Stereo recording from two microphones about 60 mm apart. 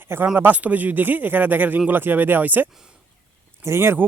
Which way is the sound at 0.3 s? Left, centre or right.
Right.